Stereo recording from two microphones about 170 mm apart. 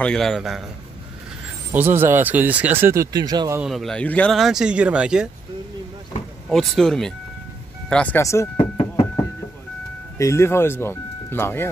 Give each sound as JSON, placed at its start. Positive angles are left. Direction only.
{"t": 0.0, "sound": "speech", "side_deg": 0}
{"t": 1.7, "sound": "speech", "side_deg": -15}
{"t": 3.6, "sound": "speech", "side_deg": 0}
{"t": 6.5, "sound": "speech", "side_deg": 0}
{"t": 10.1, "sound": "speech", "side_deg": 15}